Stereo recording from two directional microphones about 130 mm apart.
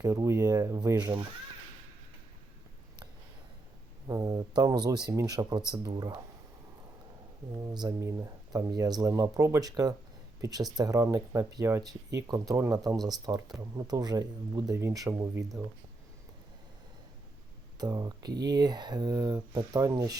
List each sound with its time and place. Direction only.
0.0 s speech: 25° right (ahead or behind)
4.0 s speech: 30° right (ahead or behind)
7.5 s speech: 30° right (ahead or behind)
17.7 s speech: 30° right (ahead or behind)